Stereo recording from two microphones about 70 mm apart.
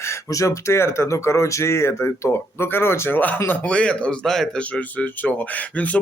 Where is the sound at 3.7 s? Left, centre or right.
Centre.